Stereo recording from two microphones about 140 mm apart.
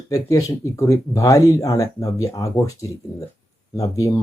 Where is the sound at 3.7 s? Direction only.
25° left (ahead or behind).